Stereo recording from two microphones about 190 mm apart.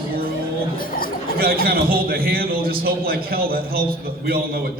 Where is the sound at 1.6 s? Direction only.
50° right (ahead or behind).